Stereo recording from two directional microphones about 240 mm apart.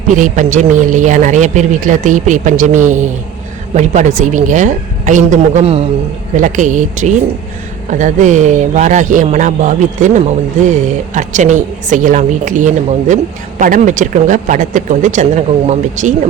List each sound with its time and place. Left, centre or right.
0.2 s speech: right